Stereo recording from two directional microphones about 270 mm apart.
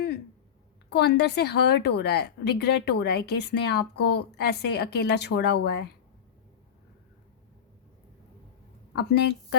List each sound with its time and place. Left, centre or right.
0.9 s a woman's voice: left
8.9 s a woman's voice: left